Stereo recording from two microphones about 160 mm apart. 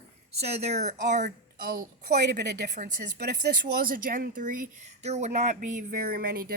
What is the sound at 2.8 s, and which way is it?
Speech, 50° right (ahead or behind).